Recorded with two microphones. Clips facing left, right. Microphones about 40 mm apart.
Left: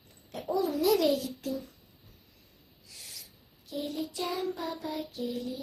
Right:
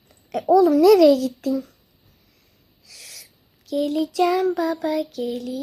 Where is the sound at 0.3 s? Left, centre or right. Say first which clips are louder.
Right 14 dB; right.